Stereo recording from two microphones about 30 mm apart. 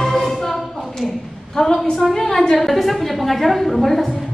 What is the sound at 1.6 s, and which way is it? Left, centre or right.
Speech, left.